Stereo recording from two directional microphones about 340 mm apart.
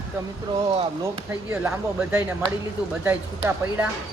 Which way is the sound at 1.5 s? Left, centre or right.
Centre.